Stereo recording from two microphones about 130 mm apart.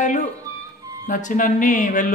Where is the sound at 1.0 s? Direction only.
80° left.